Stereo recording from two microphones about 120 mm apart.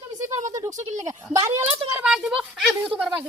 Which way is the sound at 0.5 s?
25° right (ahead or behind).